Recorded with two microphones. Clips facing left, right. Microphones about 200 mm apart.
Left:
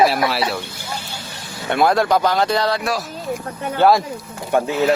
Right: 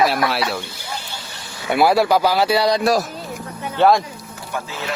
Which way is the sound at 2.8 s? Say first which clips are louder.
Right 6 dB; 40° right (ahead or behind).